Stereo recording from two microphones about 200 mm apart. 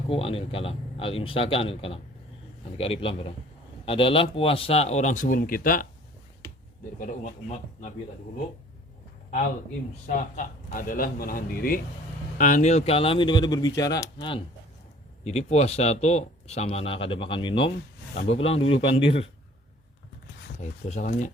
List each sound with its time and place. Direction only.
0.1 s speech: 30° left (ahead or behind); by 5.9 s 45° left (ahead or behind)
7.0 s speech: 40° left (ahead or behind)
10.1 s a man's voice: 40° left (ahead or behind)
20.6 s speech: 35° left (ahead or behind)